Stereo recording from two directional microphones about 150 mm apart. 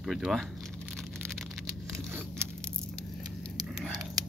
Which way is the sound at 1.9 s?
15° right (ahead or behind).